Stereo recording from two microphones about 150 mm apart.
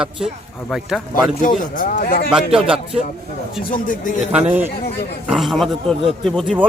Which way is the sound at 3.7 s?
65° left (ahead or behind).